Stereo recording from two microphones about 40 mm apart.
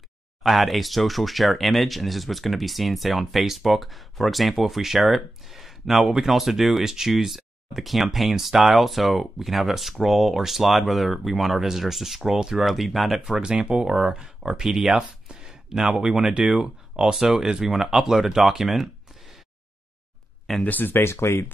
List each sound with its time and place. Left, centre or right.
0.4 s speech: centre
13.4 s speech: right
15.2 s a sound: centre
16.2 s speech: right
17.6 s speech: centre
20.6 s speech: left
20.9 s speech: left